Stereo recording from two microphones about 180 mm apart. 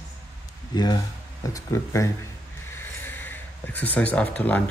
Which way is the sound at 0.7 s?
20° left (ahead or behind).